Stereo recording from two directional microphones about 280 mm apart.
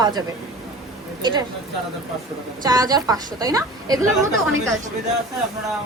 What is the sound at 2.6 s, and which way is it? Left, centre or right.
A woman's voice, centre.